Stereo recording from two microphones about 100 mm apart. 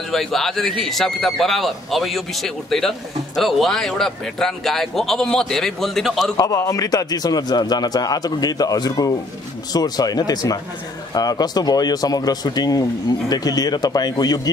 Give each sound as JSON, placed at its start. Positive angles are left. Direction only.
{"t": 0.1, "sound": "a man's voice", "side_deg": 5}
{"t": 6.3, "sound": "a man's voice", "side_deg": 35}